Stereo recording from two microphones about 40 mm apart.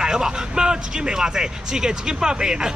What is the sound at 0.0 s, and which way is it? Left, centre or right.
Speech, centre.